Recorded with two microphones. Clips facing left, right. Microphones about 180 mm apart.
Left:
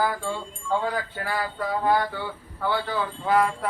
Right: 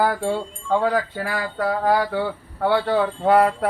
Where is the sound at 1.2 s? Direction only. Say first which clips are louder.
Right 4 dB; 75° right (ahead or behind).